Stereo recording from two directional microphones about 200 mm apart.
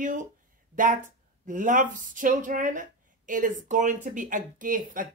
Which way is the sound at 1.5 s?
40° right (ahead or behind).